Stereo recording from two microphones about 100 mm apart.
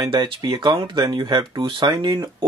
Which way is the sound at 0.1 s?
45° right (ahead or behind).